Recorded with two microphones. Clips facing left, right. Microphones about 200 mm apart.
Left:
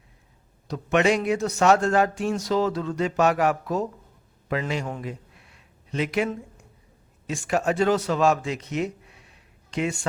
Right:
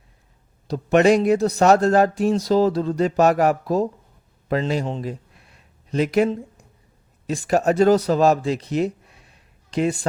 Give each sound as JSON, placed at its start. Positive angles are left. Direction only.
{"t": 0.7, "sound": "a man's voice", "side_deg": -35}
{"t": 4.9, "sound": "a sound", "side_deg": -35}
{"t": 7.3, "sound": "a man's voice", "side_deg": -35}